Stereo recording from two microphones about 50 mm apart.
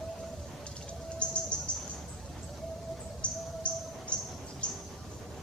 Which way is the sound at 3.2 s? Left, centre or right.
Left.